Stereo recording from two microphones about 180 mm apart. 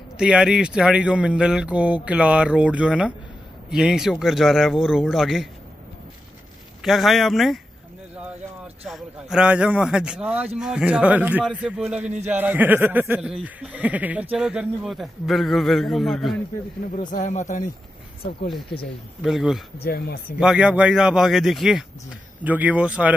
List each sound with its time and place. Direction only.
0.2 s speech: 5° right (ahead or behind)
6.8 s speech: centre (ahead or behind)
8.8 s speech: 5° right (ahead or behind)
17.1 s speech: 45° left (ahead or behind)
19.2 s speech: centre (ahead or behind)
19.8 s speech: 60° left (ahead or behind)
20.3 s speech: 5° right (ahead or behind)